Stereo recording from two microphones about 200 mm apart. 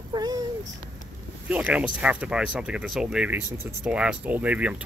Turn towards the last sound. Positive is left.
turn(degrees=-5)  # may be behind; listen again after turning